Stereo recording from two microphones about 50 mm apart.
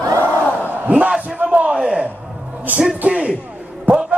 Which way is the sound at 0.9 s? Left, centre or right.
Right.